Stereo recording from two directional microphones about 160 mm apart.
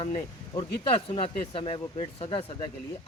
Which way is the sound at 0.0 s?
45° left (ahead or behind).